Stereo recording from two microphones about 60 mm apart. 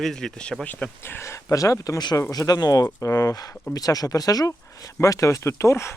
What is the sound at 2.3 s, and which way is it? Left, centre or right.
Speech, left.